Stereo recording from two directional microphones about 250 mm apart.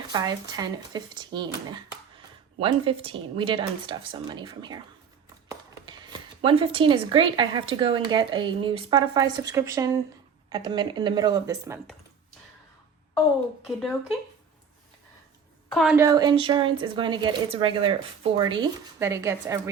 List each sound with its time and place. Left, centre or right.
0.1 s speech: centre
2.6 s speech: right
6.4 s speech: right
13.7 s speech: centre
15.7 s a woman's voice: centre
16.0 s speech: centre